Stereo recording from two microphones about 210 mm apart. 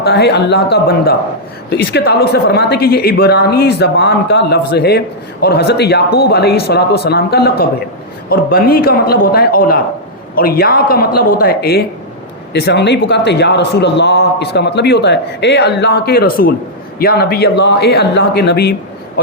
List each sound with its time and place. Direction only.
0.0 s a woman's voice: 50° left (ahead or behind)